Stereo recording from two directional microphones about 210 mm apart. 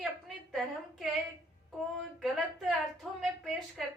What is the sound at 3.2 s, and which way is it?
Speech, centre (ahead or behind).